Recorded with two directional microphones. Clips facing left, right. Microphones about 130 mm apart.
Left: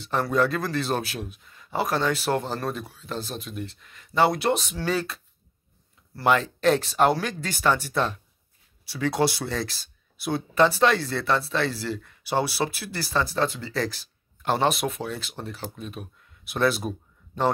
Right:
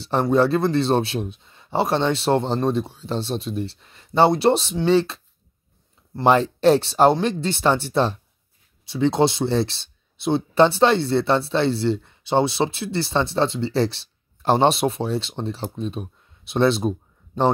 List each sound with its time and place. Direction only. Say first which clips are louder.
0.0 s speech: right 5 dB; 30° right (ahead or behind)